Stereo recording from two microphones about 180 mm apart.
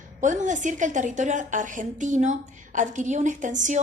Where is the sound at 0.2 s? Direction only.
45° right (ahead or behind).